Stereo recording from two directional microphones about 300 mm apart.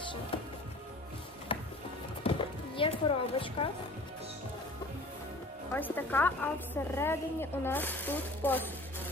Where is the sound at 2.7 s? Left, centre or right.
Centre.